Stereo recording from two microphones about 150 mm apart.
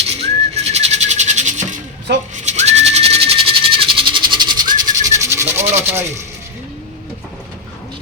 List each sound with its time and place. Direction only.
0.1 s bird: 45° right (ahead or behind)
2.3 s music: 50° right (ahead or behind); by 6.1 s 15° right (ahead or behind)